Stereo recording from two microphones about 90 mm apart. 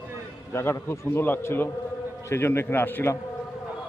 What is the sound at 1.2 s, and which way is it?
A man's voice, 25° left (ahead or behind).